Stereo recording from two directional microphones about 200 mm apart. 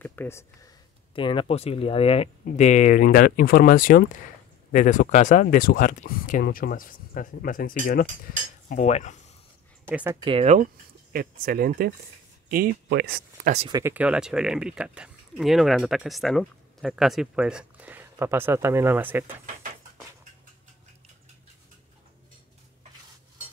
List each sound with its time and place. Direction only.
0.0 s speech: 10° left (ahead or behind)
1.1 s speech: 25° left (ahead or behind)
9.8 s speech: 10° right (ahead or behind)
10.2 s speech: 30° right (ahead or behind)
11.1 s speech: 45° right (ahead or behind)
13.7 s speech: 20° right (ahead or behind)
13.9 s speech: 5° right (ahead or behind)